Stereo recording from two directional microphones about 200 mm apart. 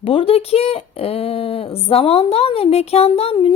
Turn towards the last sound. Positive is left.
turn(degrees=25)  # may be behind; listen again after turning